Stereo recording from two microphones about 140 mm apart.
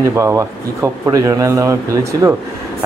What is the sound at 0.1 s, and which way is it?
A man's voice, 20° right (ahead or behind).